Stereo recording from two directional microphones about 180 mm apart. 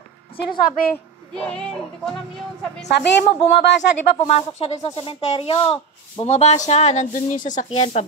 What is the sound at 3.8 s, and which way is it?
Speech, 40° left (ahead or behind).